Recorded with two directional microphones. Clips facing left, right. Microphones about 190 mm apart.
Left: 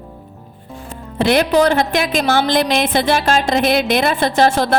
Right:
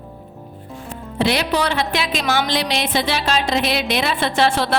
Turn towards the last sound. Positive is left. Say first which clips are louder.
# left 4 dB
turn(degrees=45)  # may be behind; listen again after turning